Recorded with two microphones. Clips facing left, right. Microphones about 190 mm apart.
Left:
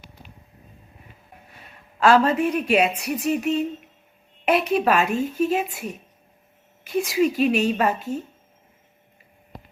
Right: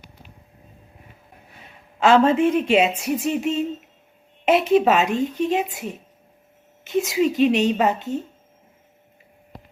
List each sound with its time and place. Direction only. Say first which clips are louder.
2.0 s a woman's voice: right 2 dB; 25° right (ahead or behind)